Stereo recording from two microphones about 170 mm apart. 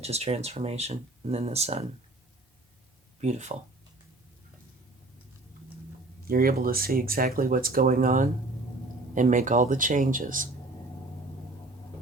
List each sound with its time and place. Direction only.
0.0 s speech: 40° right (ahead or behind)
3.2 s speech: 40° right (ahead or behind)
6.2 s speech: 60° right (ahead or behind)